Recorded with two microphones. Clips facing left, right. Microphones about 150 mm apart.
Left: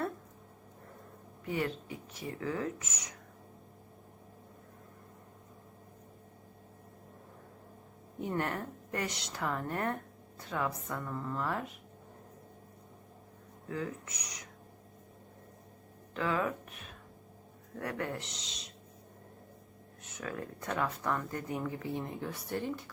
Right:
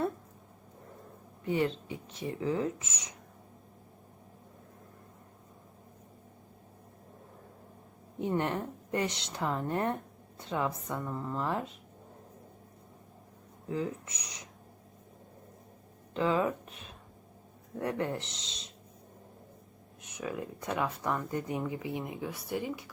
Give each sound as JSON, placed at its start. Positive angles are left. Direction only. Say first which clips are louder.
{"t": 1.5, "sound": "speech", "louder": "right 5 dB", "side_deg": -25}
{"t": 8.3, "sound": "a woman's voice", "louder": "right 3 dB", "side_deg": -20}
{"t": 13.7, "sound": "speech", "louder": "right 4 dB", "side_deg": -25}
{"t": 16.1, "sound": "speech", "louder": "right 4 dB", "side_deg": -25}
{"t": 17.7, "sound": "speech", "louder": "right 4 dB", "side_deg": -25}
{"t": 20.0, "sound": "speech", "louder": "right 3 dB", "side_deg": -15}